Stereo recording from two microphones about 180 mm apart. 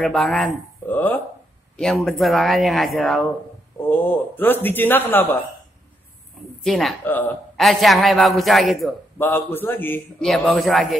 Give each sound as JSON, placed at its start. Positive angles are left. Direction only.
{"t": 0.0, "sound": "a man's voice", "side_deg": 0}
{"t": 3.9, "sound": "speech", "side_deg": 10}
{"t": 6.6, "sound": "a man's voice", "side_deg": 0}
{"t": 9.2, "sound": "a man's voice", "side_deg": 10}